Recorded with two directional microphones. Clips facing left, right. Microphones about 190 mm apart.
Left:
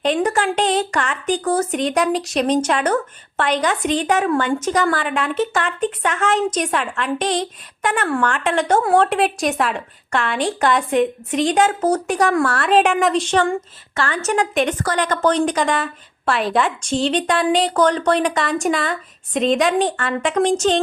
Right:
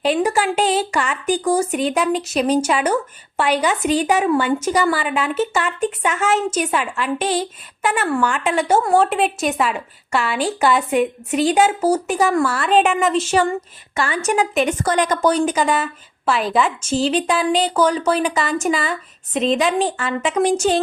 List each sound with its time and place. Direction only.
0.0 s a woman's voice: 10° right (ahead or behind)
14.8 s a woman's voice: 15° right (ahead or behind)